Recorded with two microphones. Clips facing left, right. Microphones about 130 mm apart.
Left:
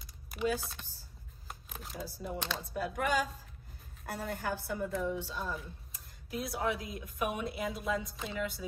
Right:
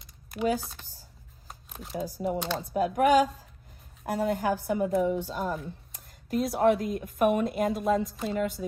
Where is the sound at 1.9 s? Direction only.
70° right (ahead or behind).